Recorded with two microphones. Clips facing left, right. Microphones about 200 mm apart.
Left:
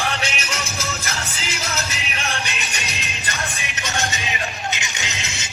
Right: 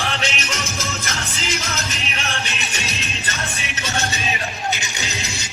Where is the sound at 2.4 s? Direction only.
15° left (ahead or behind).